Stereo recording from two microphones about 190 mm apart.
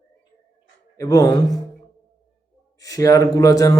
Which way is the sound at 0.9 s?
15° left (ahead or behind).